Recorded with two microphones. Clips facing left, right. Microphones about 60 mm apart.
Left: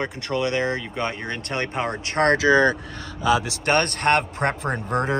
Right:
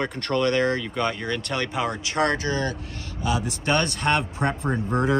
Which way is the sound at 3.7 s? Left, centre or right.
Left.